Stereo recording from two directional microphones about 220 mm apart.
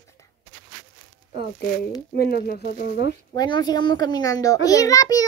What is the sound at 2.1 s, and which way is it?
Speech, 45° left (ahead or behind).